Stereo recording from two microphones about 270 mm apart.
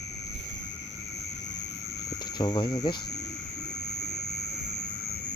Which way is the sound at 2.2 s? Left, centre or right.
Centre.